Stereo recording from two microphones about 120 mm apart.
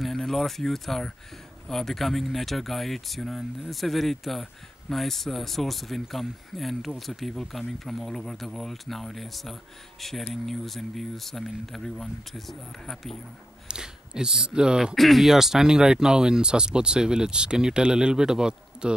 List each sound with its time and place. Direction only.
0.0 s speech: centre (ahead or behind)